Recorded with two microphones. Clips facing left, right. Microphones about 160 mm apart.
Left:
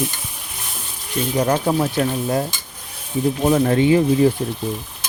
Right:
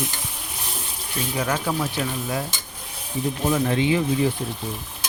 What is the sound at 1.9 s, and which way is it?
Stir, 40° left (ahead or behind).